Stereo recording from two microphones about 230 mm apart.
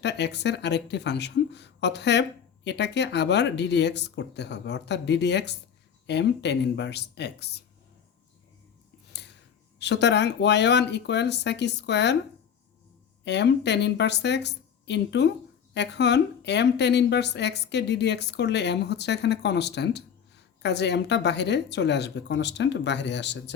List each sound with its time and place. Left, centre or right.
0.0 s a woman's voice: left
9.7 s a woman's voice: left
13.2 s a woman's voice: left